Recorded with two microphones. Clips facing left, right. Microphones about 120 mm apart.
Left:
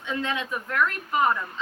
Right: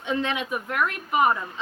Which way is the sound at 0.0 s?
20° right (ahead or behind).